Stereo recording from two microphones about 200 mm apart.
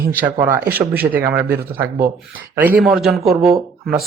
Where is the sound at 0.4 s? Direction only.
10° right (ahead or behind).